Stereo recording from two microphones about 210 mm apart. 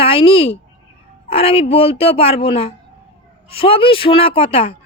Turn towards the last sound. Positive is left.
turn(degrees=25)  # may be behind; listen again after turning